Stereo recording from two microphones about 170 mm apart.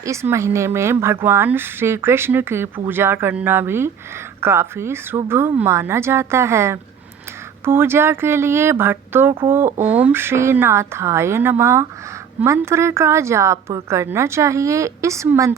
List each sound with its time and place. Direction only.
0.0 s speech: 15° right (ahead or behind)